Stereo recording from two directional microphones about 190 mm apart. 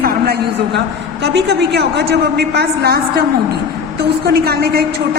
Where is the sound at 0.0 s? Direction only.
55° right (ahead or behind).